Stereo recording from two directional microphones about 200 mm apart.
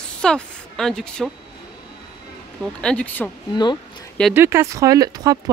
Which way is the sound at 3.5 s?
20° left (ahead or behind).